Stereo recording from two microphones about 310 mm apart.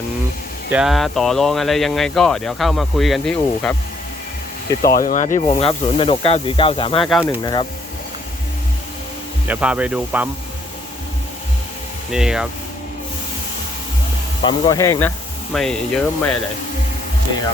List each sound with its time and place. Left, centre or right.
0.7 s speech: centre
4.8 s speech: left
7.0 s speech: centre
9.5 s speech: centre
12.1 s speech: centre
14.4 s speech: centre